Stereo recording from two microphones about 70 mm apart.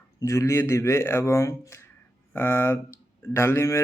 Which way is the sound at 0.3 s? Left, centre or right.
Left.